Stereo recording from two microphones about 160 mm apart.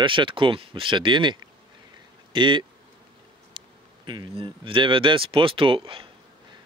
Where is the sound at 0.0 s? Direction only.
30° right (ahead or behind).